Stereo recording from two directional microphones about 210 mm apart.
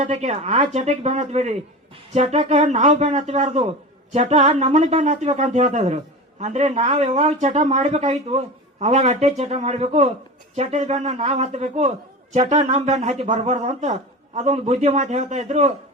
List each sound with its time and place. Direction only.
0.0 s a man's voice: 35° right (ahead or behind)